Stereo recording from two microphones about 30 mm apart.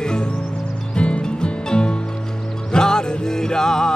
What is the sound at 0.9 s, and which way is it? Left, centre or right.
Music, left.